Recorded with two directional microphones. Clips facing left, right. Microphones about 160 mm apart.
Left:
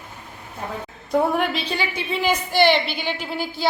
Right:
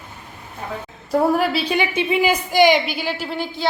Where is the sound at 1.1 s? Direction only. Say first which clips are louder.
Right 3 dB; 5° right (ahead or behind).